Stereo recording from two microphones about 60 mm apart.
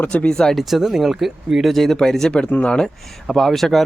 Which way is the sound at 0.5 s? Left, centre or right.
Centre.